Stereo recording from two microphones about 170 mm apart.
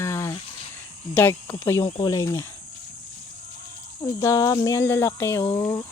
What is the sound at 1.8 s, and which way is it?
Cricket, 25° left (ahead or behind).